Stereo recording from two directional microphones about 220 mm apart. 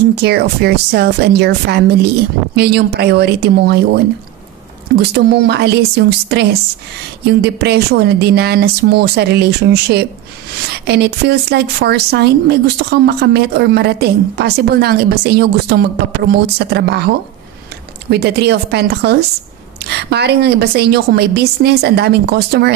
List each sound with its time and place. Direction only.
0.1 s a woman's voice: 45° right (ahead or behind)
5.1 s a woman's voice: 45° right (ahead or behind)
18.1 s a woman's voice: 50° right (ahead or behind)